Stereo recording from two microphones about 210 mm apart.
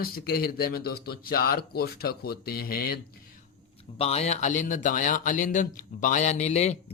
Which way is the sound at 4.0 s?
30° left (ahead or behind).